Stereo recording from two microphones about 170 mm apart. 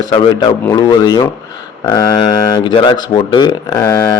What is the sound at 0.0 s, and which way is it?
Speech, 25° left (ahead or behind).